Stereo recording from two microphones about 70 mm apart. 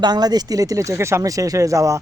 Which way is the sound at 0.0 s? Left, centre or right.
Right.